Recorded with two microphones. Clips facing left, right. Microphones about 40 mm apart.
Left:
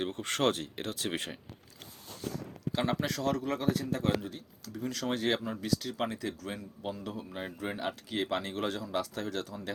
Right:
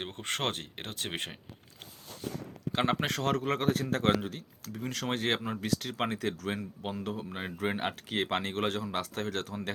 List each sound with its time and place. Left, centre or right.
0.0 s speech: right
2.7 s speech: right
4.7 s speech: right
6.8 s speech: right
7.3 s speech: right
7.6 s speech: right